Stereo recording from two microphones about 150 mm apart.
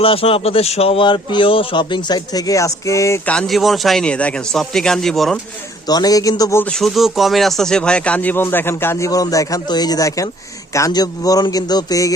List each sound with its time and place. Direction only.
0.0 s speech: 40° left (ahead or behind); by 3.2 s 20° left (ahead or behind)
3.2 s a man's voice: 5° left (ahead or behind)
5.9 s speech: 25° left (ahead or behind)
6.6 s speech: 5° left (ahead or behind); by 12.1 s 25° left (ahead or behind)